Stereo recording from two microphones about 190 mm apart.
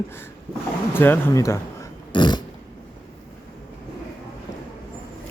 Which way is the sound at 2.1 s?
25° left (ahead or behind).